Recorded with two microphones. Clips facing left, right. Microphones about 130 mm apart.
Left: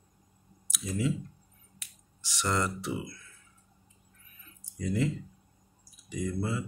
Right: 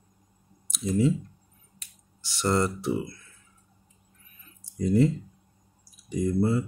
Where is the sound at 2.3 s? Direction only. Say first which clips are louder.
Right 5 dB; 30° right (ahead or behind).